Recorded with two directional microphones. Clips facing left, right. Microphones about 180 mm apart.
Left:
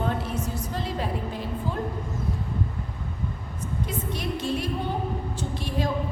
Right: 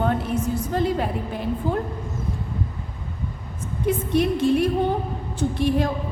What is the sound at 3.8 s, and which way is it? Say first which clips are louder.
A woman's voice: right 14 dB; 60° right (ahead or behind).